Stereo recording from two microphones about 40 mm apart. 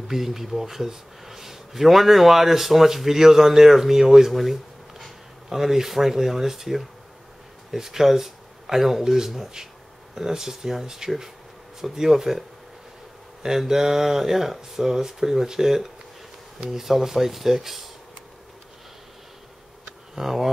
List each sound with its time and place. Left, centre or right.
0.1 s speech: centre
16.8 s speech: centre
20.2 s speech: centre